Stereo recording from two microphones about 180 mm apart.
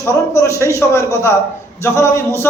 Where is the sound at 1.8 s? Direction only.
15° left (ahead or behind).